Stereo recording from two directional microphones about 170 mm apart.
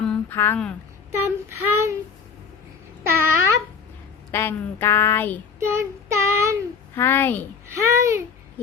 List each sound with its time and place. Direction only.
0.0 s speech: 10° left (ahead or behind)
1.2 s child singing: 15° right (ahead or behind)
3.0 s a sound: 15° right (ahead or behind)
4.3 s speech: 15° left (ahead or behind)
5.5 s child singing: 15° right (ahead or behind)
6.9 s speech: 15° left (ahead or behind)
7.7 s child singing: 15° right (ahead or behind)